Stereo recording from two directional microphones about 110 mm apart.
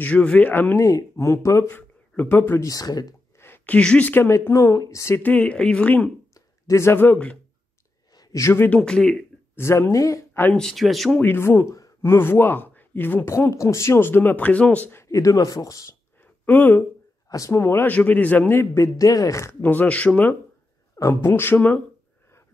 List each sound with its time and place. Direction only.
0.0 s a woman's voice: 10° left (ahead or behind)
0.8 s speech: 30° left (ahead or behind)
2.7 s speech: 35° left (ahead or behind)
3.3 s a woman's voice: 20° left (ahead or behind)
6.3 s speech: 25° left (ahead or behind)
8.1 s a sound: 35° left (ahead or behind)
8.6 s a woman's voice: 5° left (ahead or behind)
9.6 s speech: 25° left (ahead or behind)
10.5 s speech: 5° left (ahead or behind)
11.1 s speech: 20° left (ahead or behind)
16.4 s a woman's voice: 15° left (ahead or behind)
17.3 s speech: 30° left (ahead or behind); by 20.3 s 10° left (ahead or behind)
20.9 s speech: 25° left (ahead or behind)